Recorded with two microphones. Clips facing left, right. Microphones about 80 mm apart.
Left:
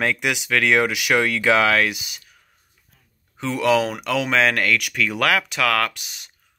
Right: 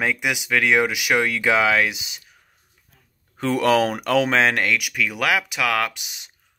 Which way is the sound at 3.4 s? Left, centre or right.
Right.